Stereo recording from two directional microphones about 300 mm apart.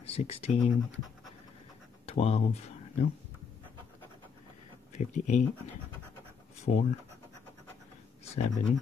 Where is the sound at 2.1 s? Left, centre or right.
Centre.